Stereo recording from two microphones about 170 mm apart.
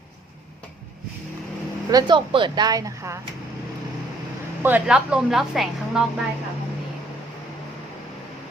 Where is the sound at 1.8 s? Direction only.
25° right (ahead or behind).